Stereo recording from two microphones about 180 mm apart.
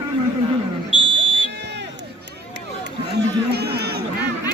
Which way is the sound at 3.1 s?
65° right (ahead or behind).